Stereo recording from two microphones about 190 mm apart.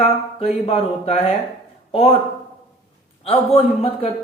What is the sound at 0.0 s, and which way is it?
Speech, 30° left (ahead or behind).